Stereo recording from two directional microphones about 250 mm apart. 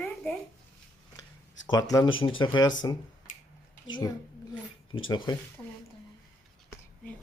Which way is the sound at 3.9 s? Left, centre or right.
Centre.